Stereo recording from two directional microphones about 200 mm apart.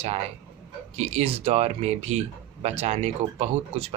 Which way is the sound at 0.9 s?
30° right (ahead or behind).